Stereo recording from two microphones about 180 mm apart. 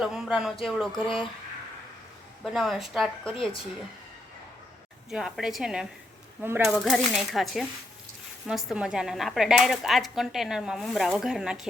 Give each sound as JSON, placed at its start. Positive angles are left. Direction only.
{"t": 0.0, "sound": "speech", "side_deg": -5}
{"t": 2.4, "sound": "speech", "side_deg": 0}
{"t": 5.1, "sound": "speech", "side_deg": -5}